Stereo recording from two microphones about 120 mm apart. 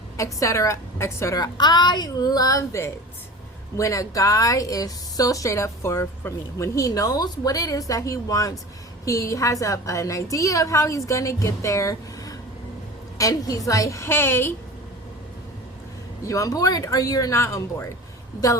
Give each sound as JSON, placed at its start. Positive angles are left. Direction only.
{"t": 0.2, "sound": "a woman's voice", "side_deg": 25}
{"t": 16.2, "sound": "a woman's voice", "side_deg": 30}